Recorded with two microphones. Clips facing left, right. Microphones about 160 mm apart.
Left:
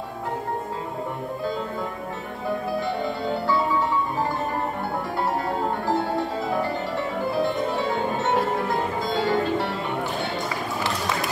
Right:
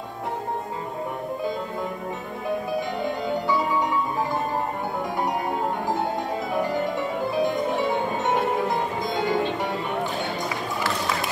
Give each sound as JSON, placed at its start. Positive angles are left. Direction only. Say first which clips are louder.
{"t": 5.9, "sound": "music", "louder": "left 2 dB", "side_deg": -15}